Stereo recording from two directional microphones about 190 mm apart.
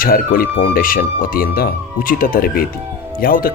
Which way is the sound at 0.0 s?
50° left (ahead or behind).